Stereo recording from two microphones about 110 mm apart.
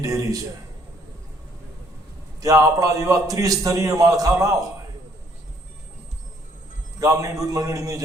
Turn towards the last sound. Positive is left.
turn(degrees=-30)  # may be behind; listen again after turning